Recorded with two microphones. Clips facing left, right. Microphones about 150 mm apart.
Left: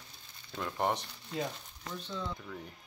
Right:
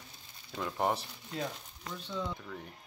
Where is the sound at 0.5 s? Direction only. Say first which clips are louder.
Right 1 dB; centre (ahead or behind).